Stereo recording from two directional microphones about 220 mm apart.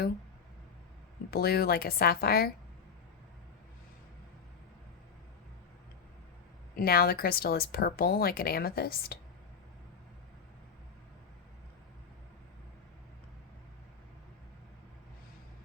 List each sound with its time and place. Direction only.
1.3 s speech: 45° left (ahead or behind)
6.7 s speech: 45° left (ahead or behind)